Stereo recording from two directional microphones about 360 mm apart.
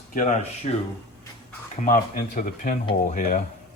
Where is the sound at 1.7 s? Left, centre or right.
Left.